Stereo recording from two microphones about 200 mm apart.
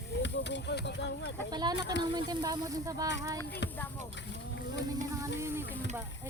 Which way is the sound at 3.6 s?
60° left (ahead or behind).